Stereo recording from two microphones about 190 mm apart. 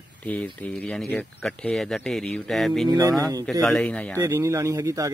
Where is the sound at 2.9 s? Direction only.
20° right (ahead or behind).